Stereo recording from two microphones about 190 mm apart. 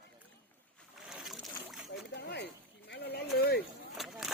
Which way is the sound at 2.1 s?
60° left (ahead or behind).